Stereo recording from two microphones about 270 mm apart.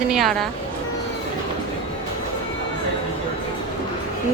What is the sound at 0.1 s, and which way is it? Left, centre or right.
Speech, centre.